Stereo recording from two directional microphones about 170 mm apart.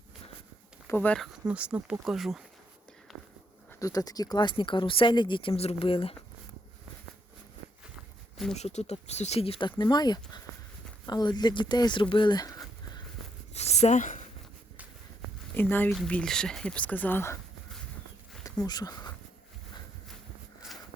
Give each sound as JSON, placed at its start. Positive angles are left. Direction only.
{"t": 0.9, "sound": "speech", "side_deg": 10}
{"t": 1.5, "sound": "speech", "side_deg": -5}
{"t": 3.1, "sound": "walk", "side_deg": 0}
{"t": 3.7, "sound": "speech", "side_deg": 20}
{"t": 7.9, "sound": "walk", "side_deg": 0}
{"t": 8.5, "sound": "speech", "side_deg": 40}
{"t": 13.5, "sound": "a sound", "side_deg": 40}
{"t": 15.5, "sound": "speech", "side_deg": 10}
{"t": 18.4, "sound": "speech", "side_deg": 20}